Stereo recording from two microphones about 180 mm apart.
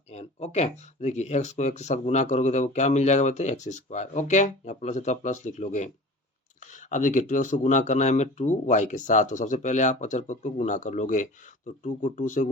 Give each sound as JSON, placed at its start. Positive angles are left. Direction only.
{"t": 0.1, "sound": "speech", "side_deg": 35}